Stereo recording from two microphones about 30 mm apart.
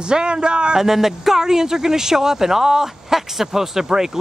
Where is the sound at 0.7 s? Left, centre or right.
Centre.